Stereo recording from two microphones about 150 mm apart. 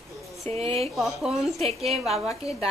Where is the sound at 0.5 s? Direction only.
45° right (ahead or behind).